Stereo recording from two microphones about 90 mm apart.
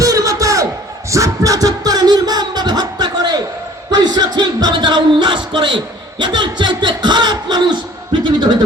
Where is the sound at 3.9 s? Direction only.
50° right (ahead or behind).